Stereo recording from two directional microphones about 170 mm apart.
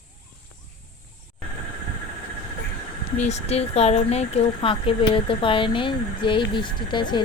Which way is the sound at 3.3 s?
40° left (ahead or behind).